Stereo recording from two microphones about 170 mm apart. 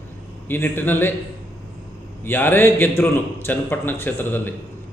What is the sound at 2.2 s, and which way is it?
Speech, 10° left (ahead or behind).